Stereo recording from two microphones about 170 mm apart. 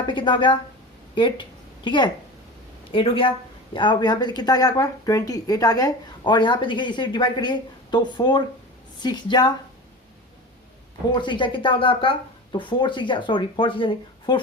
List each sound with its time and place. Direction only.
0.1 s speech: 30° left (ahead or behind)
11.1 s speech: 25° left (ahead or behind)